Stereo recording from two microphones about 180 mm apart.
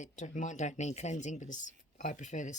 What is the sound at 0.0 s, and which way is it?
Speech, 45° left (ahead or behind).